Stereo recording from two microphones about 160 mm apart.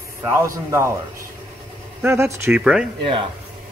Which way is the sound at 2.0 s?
15° right (ahead or behind).